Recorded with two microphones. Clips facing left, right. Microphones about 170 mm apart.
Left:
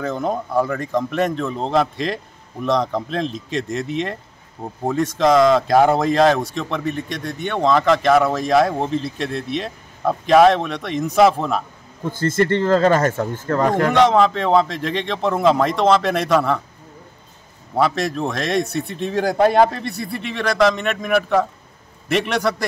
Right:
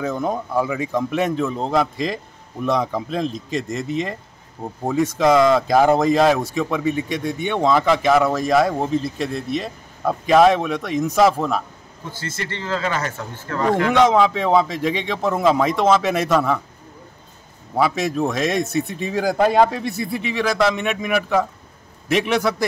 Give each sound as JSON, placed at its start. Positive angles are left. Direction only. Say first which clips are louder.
{"t": 0.0, "sound": "speech", "louder": "even", "side_deg": -5}
{"t": 12.1, "sound": "speech", "louder": "left 12 dB", "side_deg": 50}
{"t": 14.0, "sound": "speech", "louder": "left 1 dB", "side_deg": 0}
{"t": 17.7, "sound": "speech", "louder": "even", "side_deg": -5}